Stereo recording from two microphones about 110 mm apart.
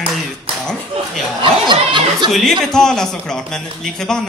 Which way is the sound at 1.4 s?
45° right (ahead or behind).